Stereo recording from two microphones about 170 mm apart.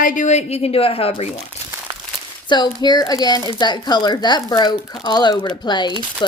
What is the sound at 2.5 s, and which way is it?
Speech, 25° left (ahead or behind).